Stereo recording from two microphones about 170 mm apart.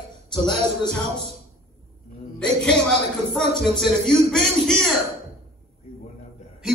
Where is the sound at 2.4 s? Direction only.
5° left (ahead or behind).